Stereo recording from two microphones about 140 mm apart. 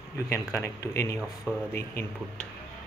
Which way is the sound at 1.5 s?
15° left (ahead or behind).